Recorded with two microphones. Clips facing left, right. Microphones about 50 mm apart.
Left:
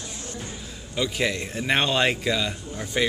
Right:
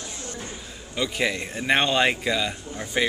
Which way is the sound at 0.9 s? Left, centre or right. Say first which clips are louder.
Even; centre.